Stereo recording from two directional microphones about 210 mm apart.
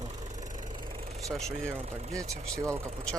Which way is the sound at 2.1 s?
15° right (ahead or behind).